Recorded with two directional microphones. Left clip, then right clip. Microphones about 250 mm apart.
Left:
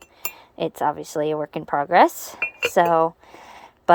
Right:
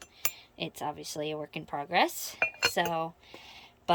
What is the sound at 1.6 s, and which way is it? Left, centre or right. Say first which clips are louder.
Speech: left 13 dB; left.